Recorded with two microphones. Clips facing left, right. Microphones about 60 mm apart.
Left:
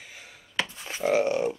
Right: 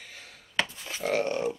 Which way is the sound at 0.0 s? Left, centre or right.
Centre.